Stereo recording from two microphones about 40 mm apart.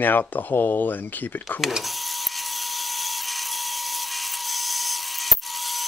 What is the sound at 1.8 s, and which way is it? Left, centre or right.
Tools, centre.